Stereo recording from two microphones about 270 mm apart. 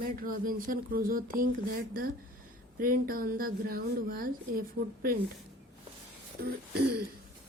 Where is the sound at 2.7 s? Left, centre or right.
Right.